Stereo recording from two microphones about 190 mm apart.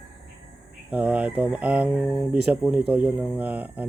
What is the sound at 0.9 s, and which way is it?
Speech, 5° right (ahead or behind).